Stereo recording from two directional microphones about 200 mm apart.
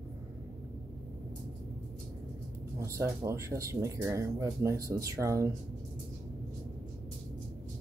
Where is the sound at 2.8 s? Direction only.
15° right (ahead or behind).